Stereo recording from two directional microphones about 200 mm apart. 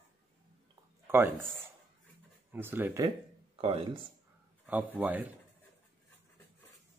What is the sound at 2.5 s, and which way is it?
Speech, 10° right (ahead or behind).